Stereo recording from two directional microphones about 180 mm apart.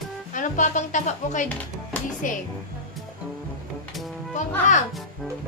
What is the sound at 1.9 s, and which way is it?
Music, 10° left (ahead or behind).